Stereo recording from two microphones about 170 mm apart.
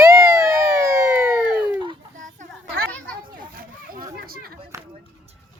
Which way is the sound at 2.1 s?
50° right (ahead or behind).